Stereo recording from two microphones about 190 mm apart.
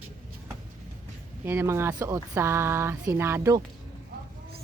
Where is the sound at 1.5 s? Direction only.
10° right (ahead or behind).